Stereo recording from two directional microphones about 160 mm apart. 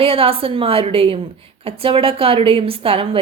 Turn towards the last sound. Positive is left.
turn(degrees=-35)  # may be behind; listen again after turning